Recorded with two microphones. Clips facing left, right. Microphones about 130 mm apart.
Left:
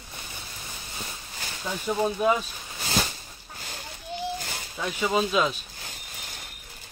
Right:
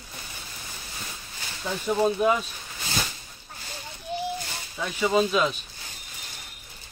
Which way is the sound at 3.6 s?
55° left (ahead or behind).